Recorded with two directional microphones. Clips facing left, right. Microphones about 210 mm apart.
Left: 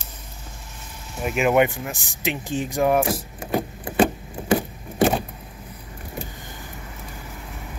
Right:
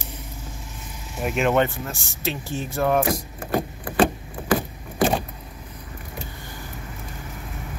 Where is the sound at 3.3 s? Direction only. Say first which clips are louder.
Even; 20° left (ahead or behind).